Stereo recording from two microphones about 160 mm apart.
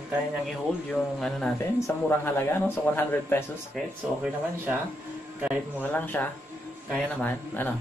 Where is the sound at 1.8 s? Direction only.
15° left (ahead or behind).